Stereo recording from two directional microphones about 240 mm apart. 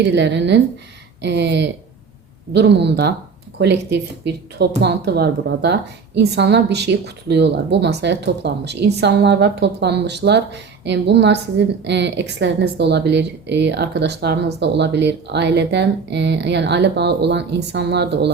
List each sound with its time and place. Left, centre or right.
0.0 s a woman's voice: right